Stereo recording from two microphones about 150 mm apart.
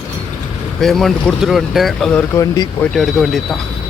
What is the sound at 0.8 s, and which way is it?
Speech, centre (ahead or behind).